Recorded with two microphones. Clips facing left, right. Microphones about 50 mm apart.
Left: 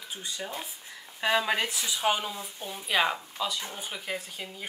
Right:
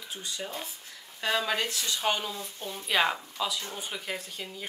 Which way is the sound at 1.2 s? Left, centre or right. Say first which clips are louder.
Left 2 dB; left.